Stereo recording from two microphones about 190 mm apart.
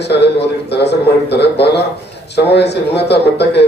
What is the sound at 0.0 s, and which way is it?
A man's voice, 60° left (ahead or behind).